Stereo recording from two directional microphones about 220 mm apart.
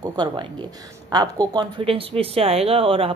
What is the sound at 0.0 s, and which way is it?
Speech, 20° right (ahead or behind).